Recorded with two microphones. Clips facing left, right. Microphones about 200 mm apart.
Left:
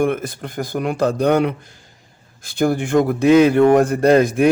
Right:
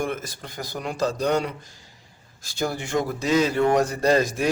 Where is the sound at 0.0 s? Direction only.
55° left (ahead or behind).